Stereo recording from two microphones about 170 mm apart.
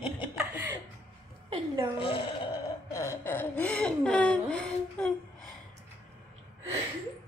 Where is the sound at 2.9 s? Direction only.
15° left (ahead or behind).